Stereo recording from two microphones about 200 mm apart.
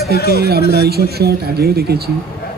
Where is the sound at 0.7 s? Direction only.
50° right (ahead or behind).